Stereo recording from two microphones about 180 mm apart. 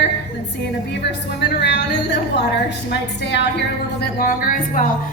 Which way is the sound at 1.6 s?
75° left (ahead or behind).